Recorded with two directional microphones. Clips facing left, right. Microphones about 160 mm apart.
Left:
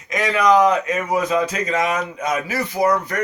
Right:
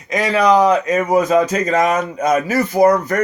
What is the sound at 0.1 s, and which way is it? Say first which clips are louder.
Speech: right 2 dB; 35° right (ahead or behind).